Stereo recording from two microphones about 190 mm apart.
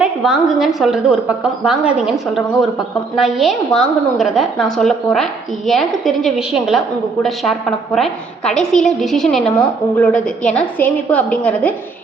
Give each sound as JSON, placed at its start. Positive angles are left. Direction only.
{"t": 0.0, "sound": "a woman's voice", "side_deg": 0}